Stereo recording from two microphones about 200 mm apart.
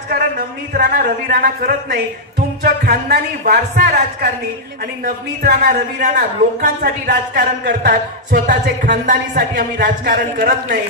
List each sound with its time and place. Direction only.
0.7 s a man's voice: 45° right (ahead or behind)